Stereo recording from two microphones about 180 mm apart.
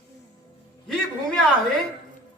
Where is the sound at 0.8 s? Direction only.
5° left (ahead or behind).